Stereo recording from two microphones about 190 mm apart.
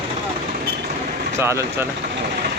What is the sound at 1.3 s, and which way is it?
Speech, 15° right (ahead or behind).